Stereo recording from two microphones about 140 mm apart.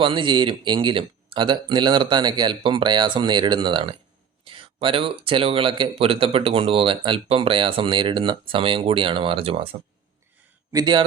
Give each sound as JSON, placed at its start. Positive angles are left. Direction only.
{"t": 0.0, "sound": "speech", "side_deg": -40}
{"t": 10.7, "sound": "a man's voice", "side_deg": -30}